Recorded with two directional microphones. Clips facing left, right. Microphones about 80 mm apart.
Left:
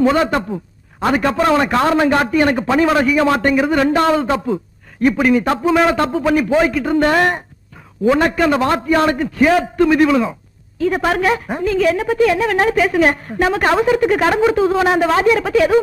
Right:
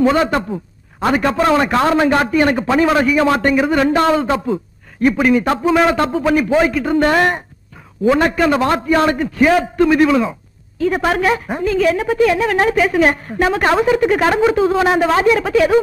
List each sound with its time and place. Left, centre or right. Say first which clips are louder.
0.0 s a woman's voice: even; right
5.2 s a woman's voice: even; right